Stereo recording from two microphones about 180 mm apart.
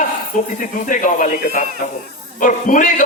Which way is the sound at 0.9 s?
45° left (ahead or behind).